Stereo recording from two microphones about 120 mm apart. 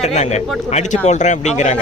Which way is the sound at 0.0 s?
65° left (ahead or behind).